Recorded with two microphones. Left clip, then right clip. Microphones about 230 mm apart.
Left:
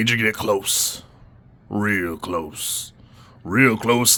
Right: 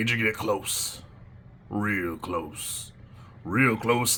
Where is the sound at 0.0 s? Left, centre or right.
Left.